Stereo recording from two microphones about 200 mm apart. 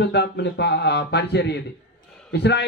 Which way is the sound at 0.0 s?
60° left (ahead or behind).